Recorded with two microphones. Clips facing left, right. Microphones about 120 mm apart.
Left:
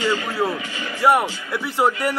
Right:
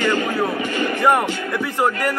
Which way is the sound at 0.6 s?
55° right (ahead or behind).